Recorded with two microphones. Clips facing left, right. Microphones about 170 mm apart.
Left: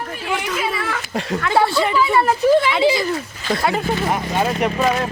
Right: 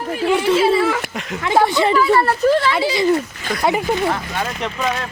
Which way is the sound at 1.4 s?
15° right (ahead or behind).